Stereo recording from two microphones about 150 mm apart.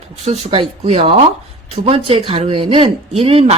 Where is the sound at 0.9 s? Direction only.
40° right (ahead or behind).